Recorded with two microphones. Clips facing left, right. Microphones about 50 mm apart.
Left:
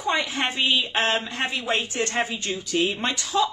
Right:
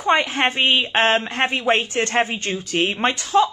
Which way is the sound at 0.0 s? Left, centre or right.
Right.